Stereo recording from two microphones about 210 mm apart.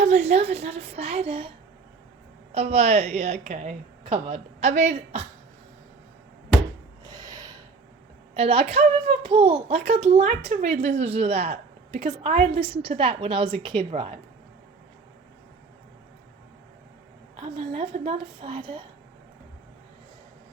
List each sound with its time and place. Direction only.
0.0 s a child's voice: 35° right (ahead or behind)
7.0 s a sound: 20° right (ahead or behind)
8.4 s a child's voice: 25° right (ahead or behind)
17.4 s a child's voice: 25° right (ahead or behind)